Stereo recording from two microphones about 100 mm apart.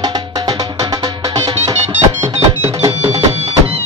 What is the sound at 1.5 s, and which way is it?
Music, 90° right.